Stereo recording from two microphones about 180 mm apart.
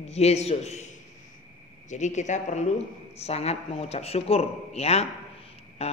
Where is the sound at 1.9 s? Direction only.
40° left (ahead or behind).